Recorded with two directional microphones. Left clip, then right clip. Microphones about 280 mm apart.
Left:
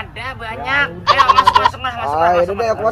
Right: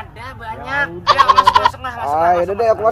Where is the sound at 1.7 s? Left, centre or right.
Centre.